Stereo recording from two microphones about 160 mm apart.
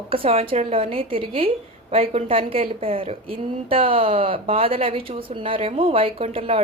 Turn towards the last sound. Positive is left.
turn(degrees=-35)  # may be behind; listen again after turning